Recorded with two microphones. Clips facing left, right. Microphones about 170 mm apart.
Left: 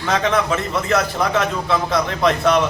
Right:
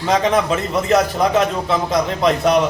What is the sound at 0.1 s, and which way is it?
A man's voice, 15° right (ahead or behind).